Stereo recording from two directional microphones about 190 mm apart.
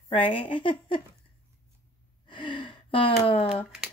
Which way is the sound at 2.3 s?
25° left (ahead or behind).